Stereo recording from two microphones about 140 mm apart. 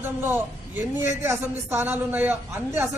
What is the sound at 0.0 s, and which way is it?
A man's voice, 15° right (ahead or behind).